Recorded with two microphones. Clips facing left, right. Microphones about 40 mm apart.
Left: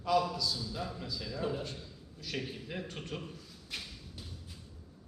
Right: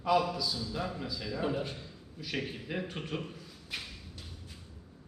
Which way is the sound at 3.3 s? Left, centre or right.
Centre.